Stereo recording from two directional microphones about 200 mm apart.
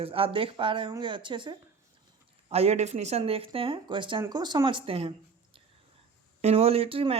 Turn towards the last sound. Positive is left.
turn(degrees=-30)  # may be behind; listen again after turning